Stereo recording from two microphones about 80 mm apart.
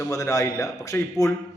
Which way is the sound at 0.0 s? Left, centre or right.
Left.